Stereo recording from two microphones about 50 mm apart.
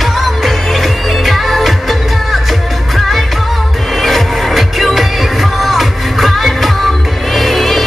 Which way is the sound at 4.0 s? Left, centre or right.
Centre.